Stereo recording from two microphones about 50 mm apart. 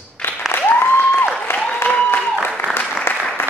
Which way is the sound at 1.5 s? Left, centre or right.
Left.